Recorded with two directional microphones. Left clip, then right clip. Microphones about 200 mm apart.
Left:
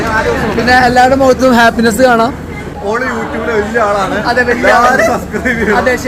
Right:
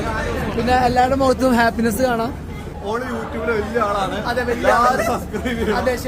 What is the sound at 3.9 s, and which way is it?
Speech, 10° right (ahead or behind).